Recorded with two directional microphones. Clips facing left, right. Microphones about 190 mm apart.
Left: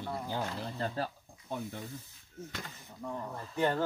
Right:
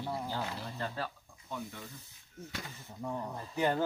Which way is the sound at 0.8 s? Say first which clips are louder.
Left 4 dB; 30° left (ahead or behind).